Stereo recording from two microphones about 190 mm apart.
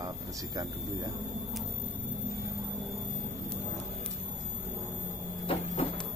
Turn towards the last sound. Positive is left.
turn(degrees=30)  # may be behind; listen again after turning